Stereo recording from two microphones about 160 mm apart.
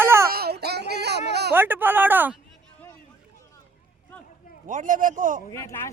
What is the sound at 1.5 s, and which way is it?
Speech, 15° right (ahead or behind).